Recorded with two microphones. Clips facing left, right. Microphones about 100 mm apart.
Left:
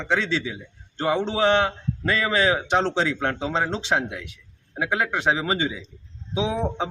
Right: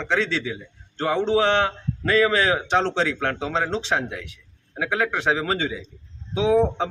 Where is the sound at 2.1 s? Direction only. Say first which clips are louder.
Right 3 dB; 20° left (ahead or behind).